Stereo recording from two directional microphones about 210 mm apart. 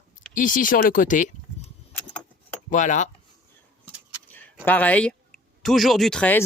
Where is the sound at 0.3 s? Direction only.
40° left (ahead or behind).